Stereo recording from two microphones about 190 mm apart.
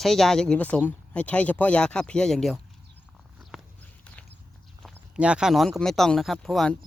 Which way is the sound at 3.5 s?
5° right (ahead or behind).